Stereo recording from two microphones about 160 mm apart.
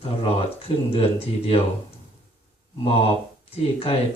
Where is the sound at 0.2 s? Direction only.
35° left (ahead or behind).